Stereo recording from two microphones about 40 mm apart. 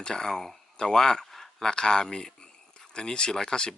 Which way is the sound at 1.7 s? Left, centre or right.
Centre.